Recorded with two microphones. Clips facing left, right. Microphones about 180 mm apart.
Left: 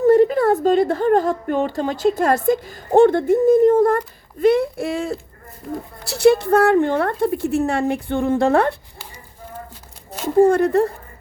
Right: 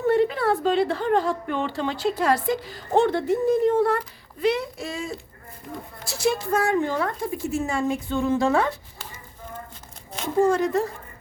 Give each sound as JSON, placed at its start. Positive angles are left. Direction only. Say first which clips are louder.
{"t": 0.0, "sound": "a woman's voice", "louder": "left 7 dB", "side_deg": 40}
{"t": 10.5, "sound": "a woman's voice", "louder": "left 6 dB", "side_deg": 60}